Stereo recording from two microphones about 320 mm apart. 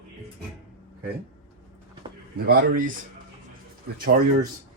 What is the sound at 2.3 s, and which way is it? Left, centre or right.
Speech, right.